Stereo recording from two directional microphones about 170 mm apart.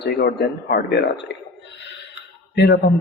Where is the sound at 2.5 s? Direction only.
80° left.